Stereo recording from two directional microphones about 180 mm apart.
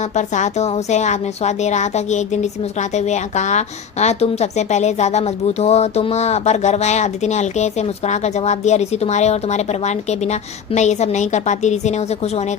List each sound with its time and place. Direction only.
0.2 s speech: 40° left (ahead or behind)